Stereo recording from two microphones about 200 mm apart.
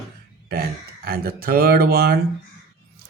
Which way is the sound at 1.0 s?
50° right (ahead or behind).